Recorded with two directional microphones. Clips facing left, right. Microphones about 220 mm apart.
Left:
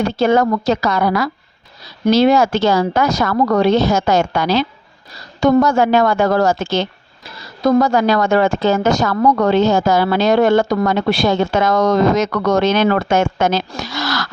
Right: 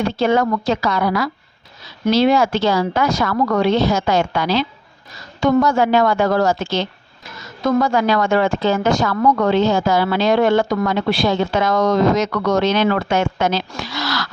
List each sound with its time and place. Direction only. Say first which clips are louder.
0.0 s a woman's voice: left 2 dB; 40° left (ahead or behind)
7.3 s a woman's voice: left 4 dB; 35° left (ahead or behind)